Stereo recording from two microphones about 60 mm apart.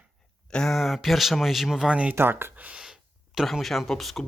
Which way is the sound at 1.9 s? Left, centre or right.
Right.